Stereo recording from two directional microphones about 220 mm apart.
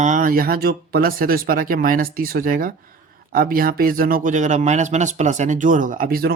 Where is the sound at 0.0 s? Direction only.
35° right (ahead or behind).